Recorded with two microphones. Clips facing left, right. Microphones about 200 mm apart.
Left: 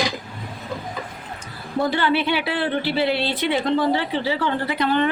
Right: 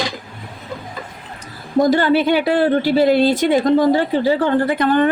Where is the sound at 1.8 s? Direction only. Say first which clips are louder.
Right 7 dB; 40° right (ahead or behind).